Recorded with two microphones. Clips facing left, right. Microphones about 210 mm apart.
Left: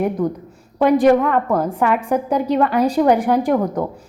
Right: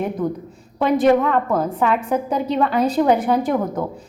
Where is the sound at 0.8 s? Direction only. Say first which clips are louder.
Left 2 dB; 10° left (ahead or behind).